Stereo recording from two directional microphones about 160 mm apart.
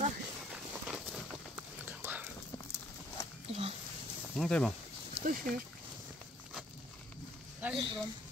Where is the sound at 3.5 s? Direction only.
35° right (ahead or behind).